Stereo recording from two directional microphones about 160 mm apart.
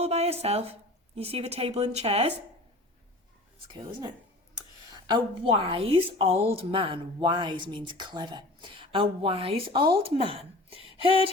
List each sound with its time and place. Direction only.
0.0 s speech: 40° right (ahead or behind)
5.0 s speech: 30° right (ahead or behind)